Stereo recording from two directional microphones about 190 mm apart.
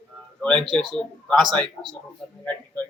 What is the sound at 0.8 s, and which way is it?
Speech, centre (ahead or behind).